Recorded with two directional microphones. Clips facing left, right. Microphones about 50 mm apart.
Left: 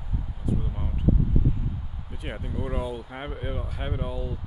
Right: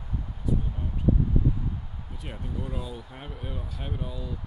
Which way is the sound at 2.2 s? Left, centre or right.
Left.